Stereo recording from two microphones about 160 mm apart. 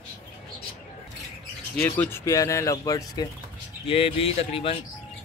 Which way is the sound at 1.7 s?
15° left (ahead or behind).